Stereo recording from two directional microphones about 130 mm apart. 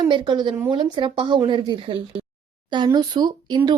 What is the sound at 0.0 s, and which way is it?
A woman's voice, 35° right (ahead or behind).